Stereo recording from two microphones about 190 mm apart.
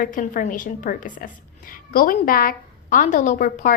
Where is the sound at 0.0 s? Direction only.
45° left (ahead or behind).